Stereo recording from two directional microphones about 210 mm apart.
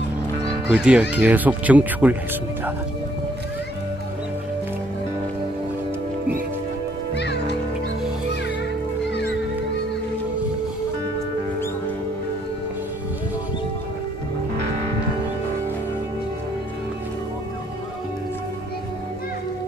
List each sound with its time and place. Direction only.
0.7 s speech: 5° right (ahead or behind)
7.2 s music: 55° left (ahead or behind)